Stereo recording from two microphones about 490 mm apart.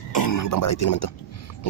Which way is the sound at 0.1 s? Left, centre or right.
Left.